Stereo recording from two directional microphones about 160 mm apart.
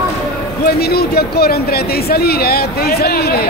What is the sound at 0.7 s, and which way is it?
Speech, 80° left.